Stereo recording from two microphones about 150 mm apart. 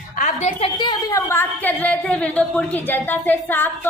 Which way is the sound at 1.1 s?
15° left (ahead or behind).